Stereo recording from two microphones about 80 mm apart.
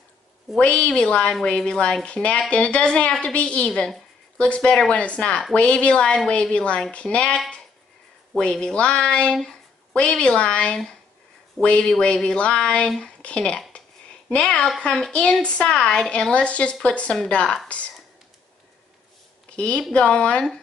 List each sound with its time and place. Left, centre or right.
0.6 s speech: centre
19.5 s a woman's voice: centre